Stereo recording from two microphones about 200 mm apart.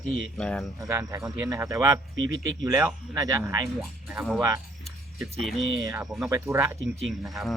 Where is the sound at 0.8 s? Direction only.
15° right (ahead or behind).